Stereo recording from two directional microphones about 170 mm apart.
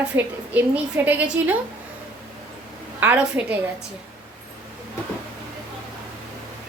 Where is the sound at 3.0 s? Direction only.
10° right (ahead or behind).